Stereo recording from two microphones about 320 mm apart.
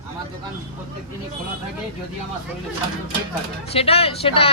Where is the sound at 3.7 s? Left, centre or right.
Centre.